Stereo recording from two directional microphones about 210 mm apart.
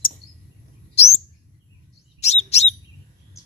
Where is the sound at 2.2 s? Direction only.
30° left (ahead or behind).